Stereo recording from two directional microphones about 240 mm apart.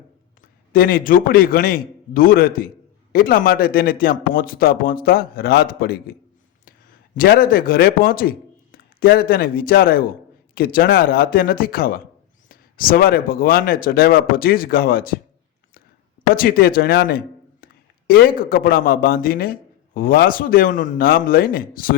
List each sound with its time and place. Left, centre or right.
0.7 s a man's voice: left
16.3 s a man's voice: left